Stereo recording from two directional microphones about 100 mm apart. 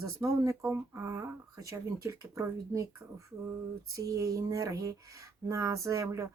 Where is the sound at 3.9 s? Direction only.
35° right (ahead or behind).